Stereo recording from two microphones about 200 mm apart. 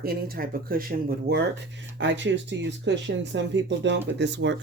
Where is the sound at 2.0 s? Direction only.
65° right (ahead or behind).